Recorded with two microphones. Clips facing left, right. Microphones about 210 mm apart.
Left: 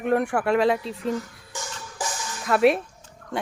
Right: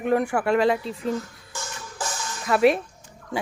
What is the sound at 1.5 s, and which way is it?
Music, 15° left (ahead or behind).